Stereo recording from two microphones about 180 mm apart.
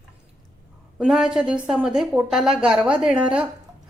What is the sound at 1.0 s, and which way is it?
A woman's voice, 5° right (ahead or behind).